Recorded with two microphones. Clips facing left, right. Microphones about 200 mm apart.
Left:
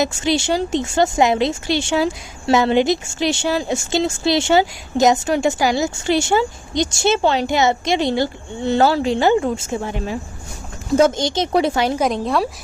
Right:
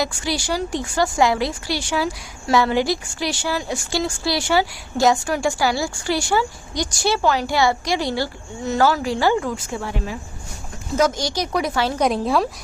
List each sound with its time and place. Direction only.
0.0 s a woman's voice: 25° left (ahead or behind)
11.9 s a woman's voice: centre (ahead or behind)